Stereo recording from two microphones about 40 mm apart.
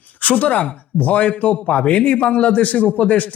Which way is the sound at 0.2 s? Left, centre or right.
Left.